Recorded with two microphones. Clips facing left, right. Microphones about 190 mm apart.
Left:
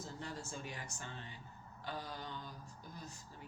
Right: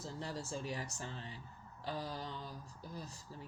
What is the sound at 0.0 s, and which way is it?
Speech, 35° right (ahead or behind).